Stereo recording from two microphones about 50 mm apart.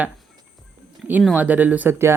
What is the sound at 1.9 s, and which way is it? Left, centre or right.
Speech, right.